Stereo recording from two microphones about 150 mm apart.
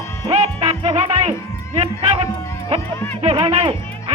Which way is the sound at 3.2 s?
40° right (ahead or behind).